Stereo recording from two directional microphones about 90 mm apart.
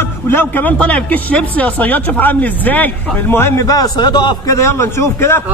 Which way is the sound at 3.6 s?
45° left (ahead or behind).